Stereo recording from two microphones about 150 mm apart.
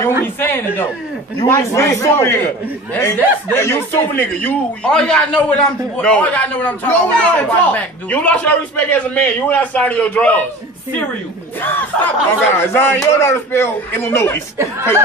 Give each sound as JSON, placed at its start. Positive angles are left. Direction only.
{"t": 0.2, "sound": "a man's voice", "side_deg": 15}
{"t": 11.6, "sound": "a man's voice", "side_deg": 15}